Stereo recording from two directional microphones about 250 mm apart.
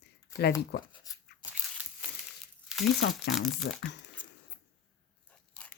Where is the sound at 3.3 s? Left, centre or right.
Centre.